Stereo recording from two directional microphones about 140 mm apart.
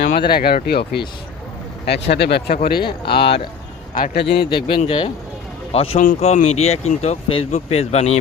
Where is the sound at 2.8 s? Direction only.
35° left (ahead or behind).